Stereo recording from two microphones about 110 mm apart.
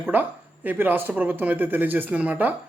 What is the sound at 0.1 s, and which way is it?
Speech, 15° right (ahead or behind).